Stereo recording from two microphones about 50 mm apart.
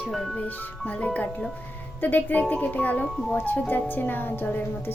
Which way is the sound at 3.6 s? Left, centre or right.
Left.